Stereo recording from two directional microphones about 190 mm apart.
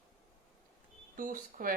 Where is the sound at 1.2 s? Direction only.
45° right (ahead or behind).